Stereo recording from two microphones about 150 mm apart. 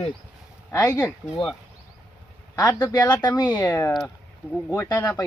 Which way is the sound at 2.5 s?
25° left (ahead or behind).